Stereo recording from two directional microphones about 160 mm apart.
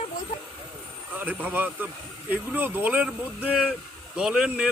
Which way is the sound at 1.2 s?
10° right (ahead or behind).